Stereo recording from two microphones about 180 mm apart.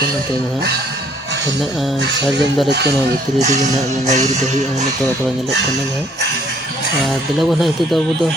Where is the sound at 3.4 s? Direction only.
40° right (ahead or behind).